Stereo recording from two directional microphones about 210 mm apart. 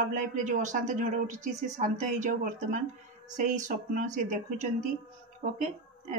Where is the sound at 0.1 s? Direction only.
35° right (ahead or behind).